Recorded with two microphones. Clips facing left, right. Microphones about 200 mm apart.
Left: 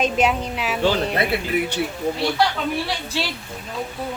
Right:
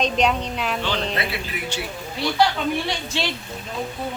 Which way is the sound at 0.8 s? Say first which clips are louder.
Left 11 dB; 40° left (ahead or behind).